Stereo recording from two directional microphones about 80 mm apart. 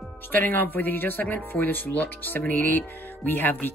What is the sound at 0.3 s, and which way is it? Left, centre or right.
A man's voice, left.